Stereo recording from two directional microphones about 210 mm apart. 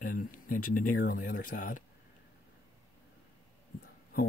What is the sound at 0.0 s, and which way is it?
Speech, 40° left (ahead or behind).